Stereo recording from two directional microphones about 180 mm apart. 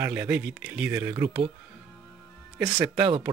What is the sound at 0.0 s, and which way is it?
Speech, 10° right (ahead or behind).